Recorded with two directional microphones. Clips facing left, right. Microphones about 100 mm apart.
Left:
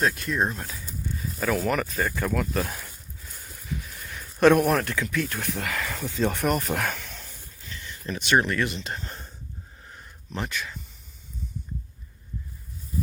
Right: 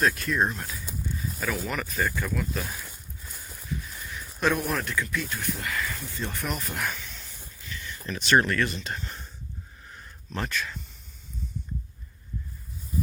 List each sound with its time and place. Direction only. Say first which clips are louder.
0.0 s speech: even; 25° left (ahead or behind)
1.5 s speech: left 4 dB; 55° left (ahead or behind)
4.4 s speech: left 8 dB; 60° left (ahead or behind); by 6.5 s 85° left
6.5 s speech: left 6 dB; 65° left (ahead or behind)
7.7 s a sound: left 1 dB; 30° left (ahead or behind)
8.3 s speech: even; 20° left (ahead or behind)
9.8 s a sound: even; 20° left (ahead or behind)